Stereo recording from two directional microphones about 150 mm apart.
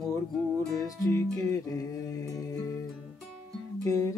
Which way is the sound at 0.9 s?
20° left (ahead or behind).